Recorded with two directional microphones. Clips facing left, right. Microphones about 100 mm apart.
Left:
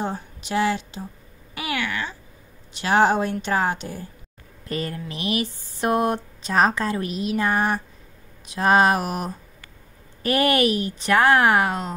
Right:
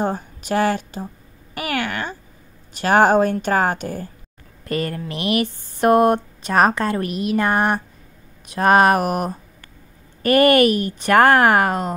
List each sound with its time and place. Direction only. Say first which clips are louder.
0.0 s a woman's voice: right 5 dB; 50° right (ahead or behind)
4.6 s a sound: right 5 dB; 65° right (ahead or behind)
8.5 s a woman's voice: right 3 dB; 55° right (ahead or behind)